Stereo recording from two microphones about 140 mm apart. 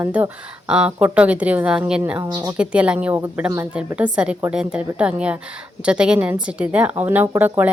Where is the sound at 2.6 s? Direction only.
10° right (ahead or behind).